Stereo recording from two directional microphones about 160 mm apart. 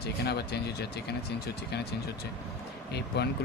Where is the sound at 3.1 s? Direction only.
90° left.